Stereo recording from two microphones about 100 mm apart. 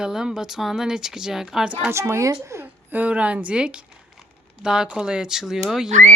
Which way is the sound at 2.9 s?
15° right (ahead or behind).